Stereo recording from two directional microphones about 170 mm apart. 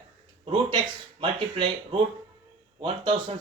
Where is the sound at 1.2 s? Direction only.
30° right (ahead or behind).